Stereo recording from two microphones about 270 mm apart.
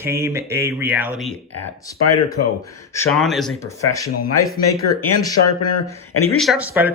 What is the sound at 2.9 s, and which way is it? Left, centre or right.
Speech, centre.